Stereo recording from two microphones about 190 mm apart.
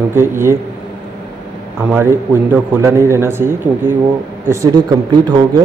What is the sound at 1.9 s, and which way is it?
A man's voice, 10° right (ahead or behind).